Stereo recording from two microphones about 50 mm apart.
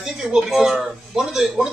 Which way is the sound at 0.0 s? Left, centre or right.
Centre.